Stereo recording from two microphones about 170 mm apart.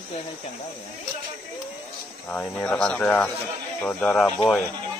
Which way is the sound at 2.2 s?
5° left (ahead or behind).